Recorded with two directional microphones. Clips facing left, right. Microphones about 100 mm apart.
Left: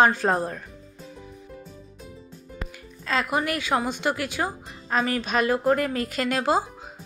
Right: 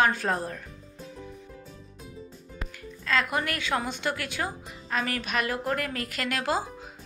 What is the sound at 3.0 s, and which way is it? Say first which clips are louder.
Speech: left 2 dB; 20° left (ahead or behind).